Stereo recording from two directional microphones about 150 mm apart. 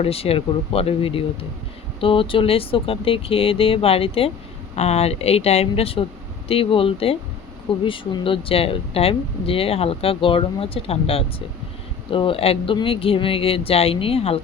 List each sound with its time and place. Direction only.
0.0 s speech: 40° left (ahead or behind)